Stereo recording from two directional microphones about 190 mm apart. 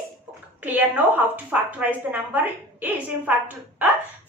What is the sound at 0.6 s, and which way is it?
A woman's voice, 10° right (ahead or behind).